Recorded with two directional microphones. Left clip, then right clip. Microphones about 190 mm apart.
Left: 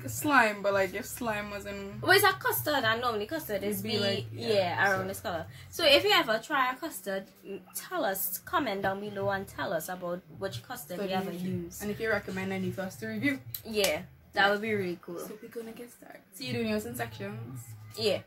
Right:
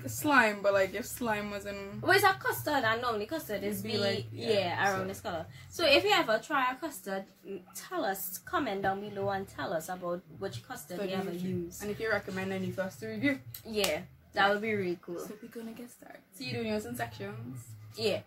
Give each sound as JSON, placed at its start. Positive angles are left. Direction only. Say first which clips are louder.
{"t": 0.0, "sound": "a woman's voice", "louder": "left 1 dB", "side_deg": -15}
{"t": 2.0, "sound": "a woman's voice", "louder": "left 2 dB", "side_deg": 10}
{"t": 11.8, "sound": "a woman's voice", "louder": "left 2 dB", "side_deg": -15}
{"t": 13.7, "sound": "a woman's voice", "louder": "left 3 dB", "side_deg": 10}
{"t": 16.5, "sound": "a woman's voice", "louder": "left 2 dB", "side_deg": -10}
{"t": 17.9, "sound": "a woman's voice", "louder": "left 2 dB", "side_deg": 10}